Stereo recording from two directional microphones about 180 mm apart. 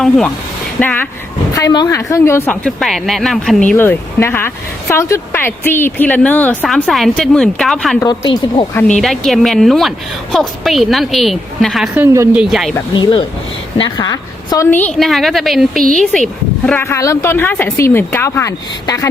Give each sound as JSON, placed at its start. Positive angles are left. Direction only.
{"t": 0.8, "sound": "speech", "side_deg": 10}
{"t": 1.5, "sound": "speech", "side_deg": 20}
{"t": 3.7, "sound": "a woman's voice", "side_deg": 10}
{"t": 11.9, "sound": "speech", "side_deg": -15}
{"t": 12.9, "sound": "speech", "side_deg": 25}
{"t": 16.6, "sound": "speech", "side_deg": 10}